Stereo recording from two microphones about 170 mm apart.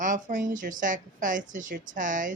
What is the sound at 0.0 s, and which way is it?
Speech, 50° right (ahead or behind).